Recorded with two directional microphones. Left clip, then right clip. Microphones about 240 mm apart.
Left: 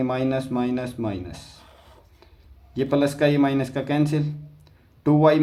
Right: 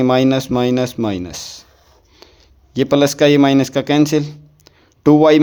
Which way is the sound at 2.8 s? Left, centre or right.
Right.